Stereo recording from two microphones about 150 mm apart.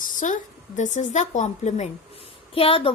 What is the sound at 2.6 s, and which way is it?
Speech, 40° left (ahead or behind).